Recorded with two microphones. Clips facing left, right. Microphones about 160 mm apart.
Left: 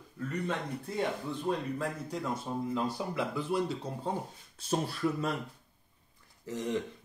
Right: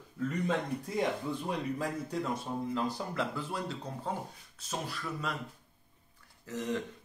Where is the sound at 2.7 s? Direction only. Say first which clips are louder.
Left 2 dB; 10° left (ahead or behind).